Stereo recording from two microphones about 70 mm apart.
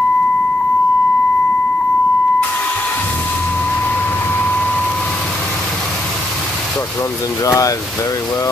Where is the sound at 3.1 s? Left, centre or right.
Left.